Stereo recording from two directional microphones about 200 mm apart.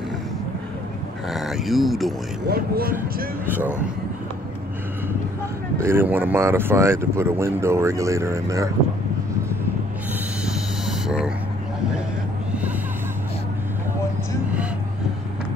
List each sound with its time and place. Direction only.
1.3 s speech: centre (ahead or behind)
2.4 s speech: 50° right (ahead or behind)
3.4 s speech: 10° right (ahead or behind)
5.8 s speech: 10° right (ahead or behind)
10.4 s a sound: 5° right (ahead or behind)